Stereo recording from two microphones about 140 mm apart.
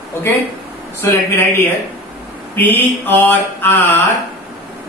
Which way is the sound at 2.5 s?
15° left (ahead or behind).